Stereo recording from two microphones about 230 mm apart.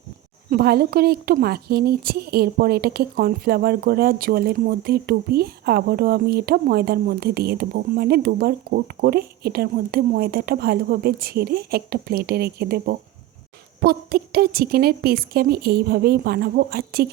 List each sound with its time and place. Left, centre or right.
0.5 s a woman's voice: right